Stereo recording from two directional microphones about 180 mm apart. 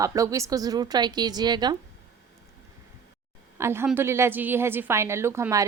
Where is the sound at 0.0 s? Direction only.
20° right (ahead or behind).